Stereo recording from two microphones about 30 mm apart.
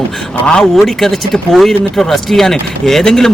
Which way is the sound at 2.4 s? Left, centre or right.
Centre.